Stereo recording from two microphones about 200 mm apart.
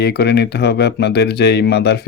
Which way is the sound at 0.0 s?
55° left (ahead or behind).